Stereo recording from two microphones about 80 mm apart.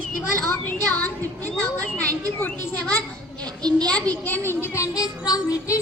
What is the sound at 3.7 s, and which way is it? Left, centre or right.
Speech, centre.